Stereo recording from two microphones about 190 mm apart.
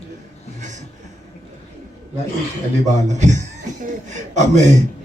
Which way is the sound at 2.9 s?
40° right (ahead or behind).